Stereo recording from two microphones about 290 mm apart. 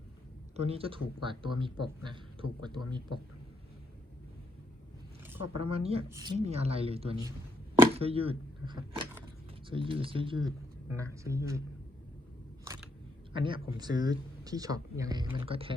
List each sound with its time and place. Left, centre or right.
0.5 s a man's voice: right
5.5 s speech: centre
6.4 s speech: right
13.3 s speech: centre